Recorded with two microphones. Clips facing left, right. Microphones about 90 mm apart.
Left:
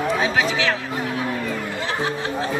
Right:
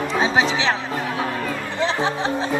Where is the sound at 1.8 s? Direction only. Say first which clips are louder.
Right 6 dB; 25° right (ahead or behind).